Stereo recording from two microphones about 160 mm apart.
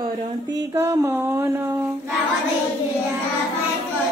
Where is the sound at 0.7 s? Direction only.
15° right (ahead or behind).